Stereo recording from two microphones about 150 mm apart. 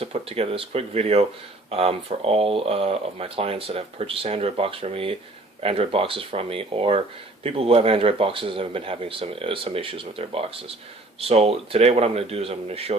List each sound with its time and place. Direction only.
0.0 s speech: 40° right (ahead or behind)